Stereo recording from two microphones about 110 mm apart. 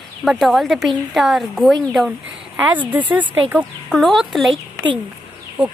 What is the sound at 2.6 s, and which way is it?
Speech, 15° right (ahead or behind).